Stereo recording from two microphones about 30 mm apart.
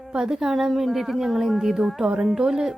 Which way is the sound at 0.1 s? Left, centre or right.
Right.